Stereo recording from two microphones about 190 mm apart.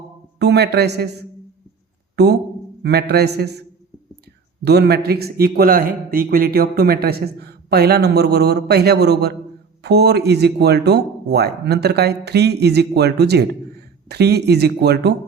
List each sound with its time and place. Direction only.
0.3 s a man's voice: 60° right (ahead or behind)
2.1 s a man's voice: 60° right (ahead or behind)
4.6 s a man's voice: 60° right (ahead or behind)